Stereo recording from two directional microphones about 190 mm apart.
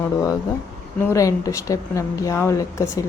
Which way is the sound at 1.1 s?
15° left (ahead or behind).